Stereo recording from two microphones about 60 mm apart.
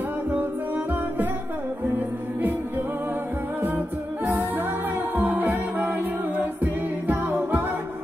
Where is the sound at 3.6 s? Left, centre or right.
Right.